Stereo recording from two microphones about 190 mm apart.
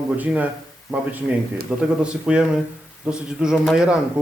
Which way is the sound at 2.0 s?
5° right (ahead or behind).